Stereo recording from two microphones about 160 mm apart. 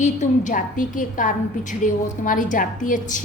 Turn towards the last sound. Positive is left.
turn(degrees=55)  # may be behind; listen again after turning